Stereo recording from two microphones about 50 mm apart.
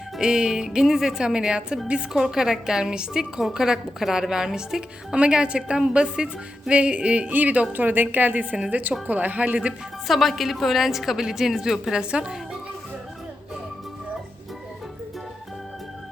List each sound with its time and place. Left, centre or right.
0.2 s speech: centre
5.1 s a woman's voice: right
10.1 s a woman's voice: centre